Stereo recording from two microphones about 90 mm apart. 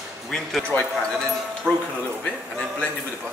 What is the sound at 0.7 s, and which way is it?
Speech, 25° left (ahead or behind).